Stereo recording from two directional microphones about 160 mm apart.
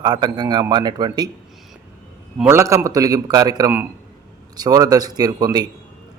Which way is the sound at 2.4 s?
15° right (ahead or behind).